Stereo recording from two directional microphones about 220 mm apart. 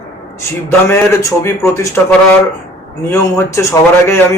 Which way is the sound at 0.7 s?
10° left (ahead or behind).